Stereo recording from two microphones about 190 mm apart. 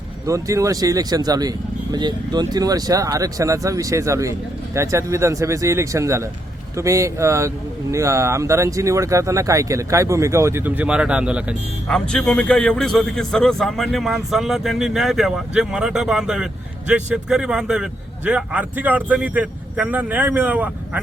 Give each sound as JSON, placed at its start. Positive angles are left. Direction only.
{"t": 0.3, "sound": "a man's voice", "side_deg": -15}